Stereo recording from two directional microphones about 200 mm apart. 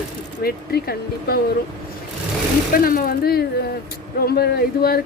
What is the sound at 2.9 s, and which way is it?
A woman's voice, 45° left (ahead or behind).